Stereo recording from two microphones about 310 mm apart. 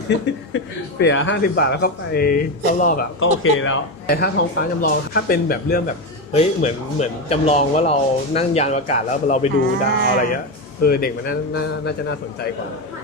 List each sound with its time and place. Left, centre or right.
0.1 s speech: left
3.2 s speech: left